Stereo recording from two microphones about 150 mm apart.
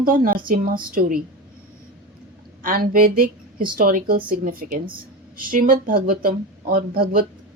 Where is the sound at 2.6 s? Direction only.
70° right (ahead or behind).